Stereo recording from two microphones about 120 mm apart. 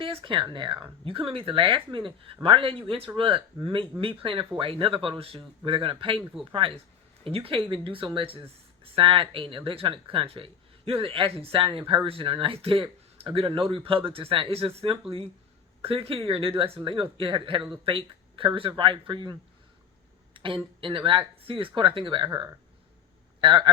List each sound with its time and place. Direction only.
0.0 s speech: 50° right (ahead or behind)